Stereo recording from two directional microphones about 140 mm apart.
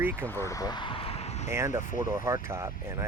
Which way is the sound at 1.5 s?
20° right (ahead or behind).